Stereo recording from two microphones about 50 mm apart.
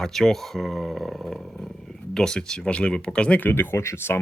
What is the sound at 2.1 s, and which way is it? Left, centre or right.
Speech, centre.